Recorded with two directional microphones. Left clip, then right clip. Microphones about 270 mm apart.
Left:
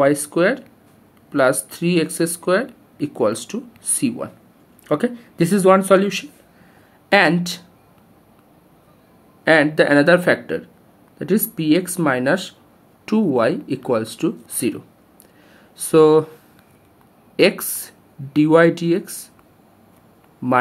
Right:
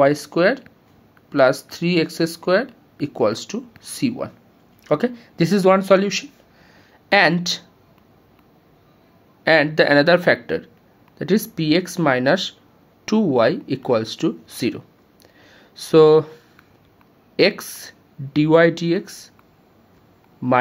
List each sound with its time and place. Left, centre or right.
0.0 s speech: centre
9.4 s speech: centre
17.4 s speech: centre
20.4 s speech: centre